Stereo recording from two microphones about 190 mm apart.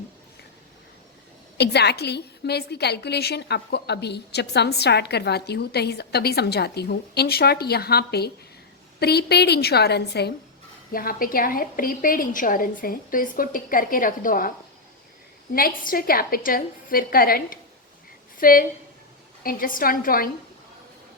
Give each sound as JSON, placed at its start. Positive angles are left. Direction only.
{"t": 1.5, "sound": "a woman's voice", "side_deg": 60}
{"t": 15.5, "sound": "a woman's voice", "side_deg": 50}